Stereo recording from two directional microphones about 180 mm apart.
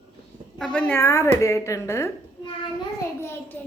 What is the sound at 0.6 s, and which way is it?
A woman's voice, 5° left (ahead or behind).